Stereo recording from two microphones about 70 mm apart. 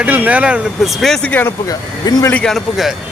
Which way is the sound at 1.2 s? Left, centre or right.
Left.